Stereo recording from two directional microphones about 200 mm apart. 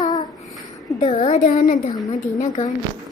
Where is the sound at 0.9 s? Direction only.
35° left (ahead or behind).